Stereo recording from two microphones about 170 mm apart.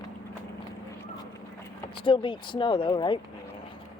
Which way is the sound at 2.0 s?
30° left (ahead or behind).